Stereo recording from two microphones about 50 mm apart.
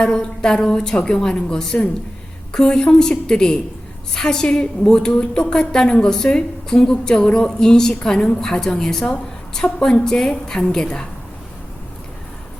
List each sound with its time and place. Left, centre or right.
0.0 s a woman's voice: centre